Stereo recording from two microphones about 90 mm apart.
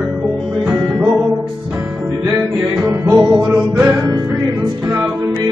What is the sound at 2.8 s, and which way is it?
Music, 20° right (ahead or behind).